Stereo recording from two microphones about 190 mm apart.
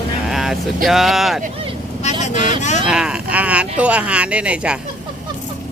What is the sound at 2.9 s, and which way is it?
Speech, 5° right (ahead or behind).